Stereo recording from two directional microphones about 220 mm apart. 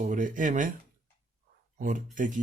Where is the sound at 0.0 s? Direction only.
35° right (ahead or behind).